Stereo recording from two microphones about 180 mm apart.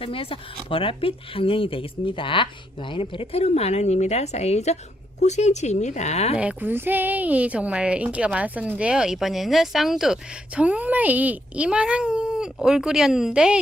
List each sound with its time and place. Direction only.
0.0 s speech: 30° left (ahead or behind)
6.3 s a woman's voice: 5° right (ahead or behind)